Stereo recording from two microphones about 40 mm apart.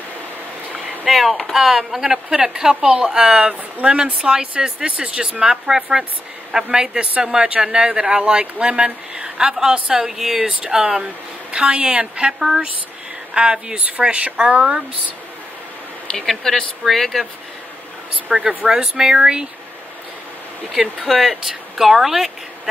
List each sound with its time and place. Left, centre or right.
1.0 s speech: centre; by 5.2 s right
5.4 s speech: centre
10.4 s speech: right
12.4 s speech: centre
13.3 s speech: right
16.3 s speech: centre
18.3 s speech: centre
18.7 s speech: centre
20.7 s speech: centre